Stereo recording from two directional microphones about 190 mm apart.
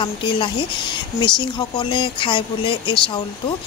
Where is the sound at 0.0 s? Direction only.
25° left (ahead or behind).